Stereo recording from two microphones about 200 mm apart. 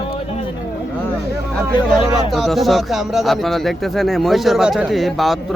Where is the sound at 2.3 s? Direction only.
Centre (ahead or behind).